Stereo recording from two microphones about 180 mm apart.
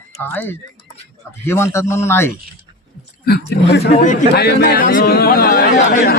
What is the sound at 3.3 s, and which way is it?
Speech, 70° left (ahead or behind).